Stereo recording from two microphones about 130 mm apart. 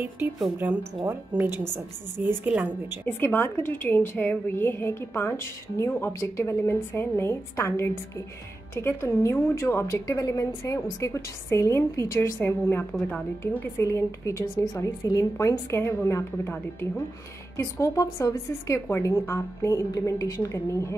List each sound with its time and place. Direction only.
0.6 s a woman's voice: 15° right (ahead or behind)
3.1 s a woman's voice: 15° left (ahead or behind)
17.6 s a woman's voice: 25° left (ahead or behind)